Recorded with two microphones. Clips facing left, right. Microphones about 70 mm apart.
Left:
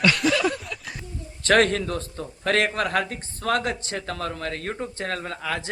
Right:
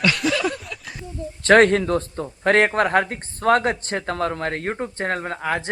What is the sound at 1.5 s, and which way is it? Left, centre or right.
Speech, right.